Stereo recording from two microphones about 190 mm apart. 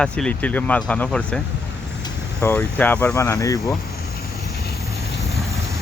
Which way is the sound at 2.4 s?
10° left (ahead or behind).